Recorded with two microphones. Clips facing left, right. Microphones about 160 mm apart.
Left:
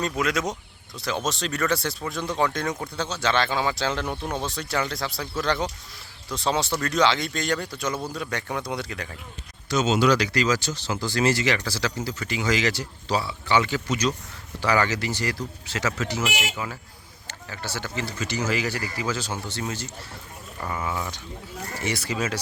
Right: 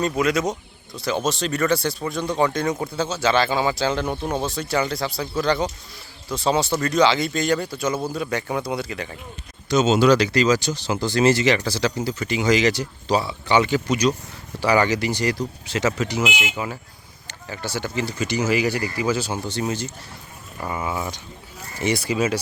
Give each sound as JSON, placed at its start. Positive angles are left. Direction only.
{"t": 0.0, "sound": "speech", "side_deg": 0}
{"t": 9.6, "sound": "speech", "side_deg": -25}
{"t": 17.2, "sound": "speech", "side_deg": -15}